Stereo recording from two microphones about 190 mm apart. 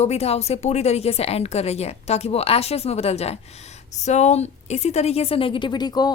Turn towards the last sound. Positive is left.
turn(degrees=20)  # may be behind; listen again after turning